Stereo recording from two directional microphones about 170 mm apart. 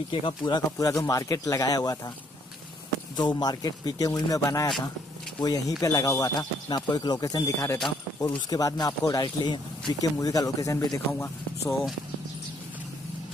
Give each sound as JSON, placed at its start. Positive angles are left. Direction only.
{"t": 0.1, "sound": "speech", "side_deg": 30}
{"t": 3.2, "sound": "speech", "side_deg": 25}